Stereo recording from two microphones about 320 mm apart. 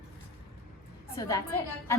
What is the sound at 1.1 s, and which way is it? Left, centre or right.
Speech, centre.